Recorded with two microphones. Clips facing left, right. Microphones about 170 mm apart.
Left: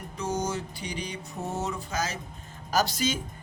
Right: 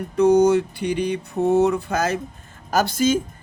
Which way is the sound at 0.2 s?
65° right (ahead or behind).